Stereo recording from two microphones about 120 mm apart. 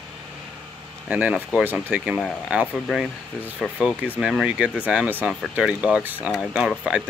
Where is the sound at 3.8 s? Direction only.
5° right (ahead or behind).